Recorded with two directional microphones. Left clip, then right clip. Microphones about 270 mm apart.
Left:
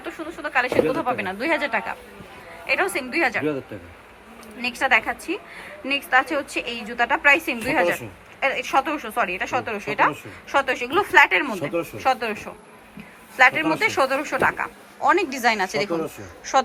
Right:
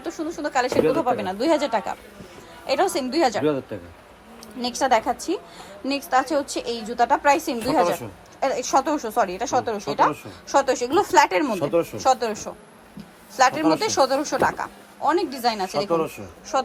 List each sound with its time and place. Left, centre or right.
0.0 s speech: centre
0.7 s speech: centre
1.0 s a woman's voice: centre
4.6 s a woman's voice: centre
11.5 s speech: centre
11.9 s a woman's voice: centre